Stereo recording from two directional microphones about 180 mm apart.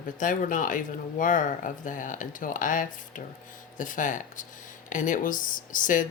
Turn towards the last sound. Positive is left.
turn(degrees=45)  # may be behind; listen again after turning